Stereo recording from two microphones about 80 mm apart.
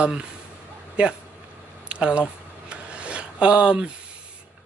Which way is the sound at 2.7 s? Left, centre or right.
Centre.